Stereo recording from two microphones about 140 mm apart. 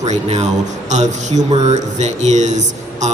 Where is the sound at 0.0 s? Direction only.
55° right (ahead or behind).